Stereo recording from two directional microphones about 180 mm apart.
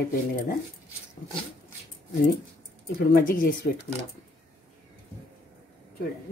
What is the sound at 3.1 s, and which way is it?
Speech, 55° left (ahead or behind).